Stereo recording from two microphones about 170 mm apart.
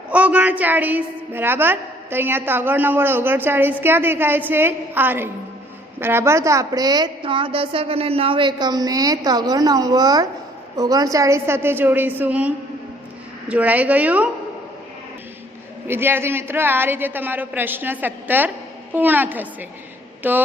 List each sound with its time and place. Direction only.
0.1 s a woman's voice: 10° right (ahead or behind)
15.9 s a woman's voice: 15° right (ahead or behind)